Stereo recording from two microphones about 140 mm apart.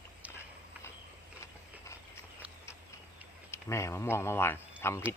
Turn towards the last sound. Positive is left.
turn(degrees=15)  # may be behind; listen again after turning